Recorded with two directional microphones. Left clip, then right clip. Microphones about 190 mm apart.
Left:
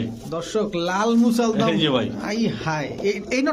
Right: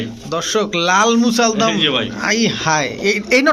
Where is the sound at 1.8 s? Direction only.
55° left (ahead or behind).